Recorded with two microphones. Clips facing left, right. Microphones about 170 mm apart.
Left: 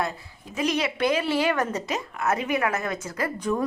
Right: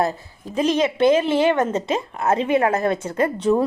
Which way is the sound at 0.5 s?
30° right (ahead or behind).